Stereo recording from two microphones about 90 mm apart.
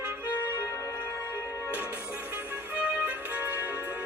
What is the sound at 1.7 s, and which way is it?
Music, 20° right (ahead or behind).